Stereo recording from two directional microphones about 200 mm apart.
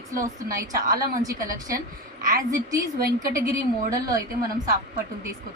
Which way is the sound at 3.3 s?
15° right (ahead or behind).